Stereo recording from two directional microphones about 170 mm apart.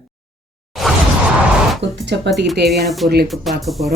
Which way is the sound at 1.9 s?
90° right.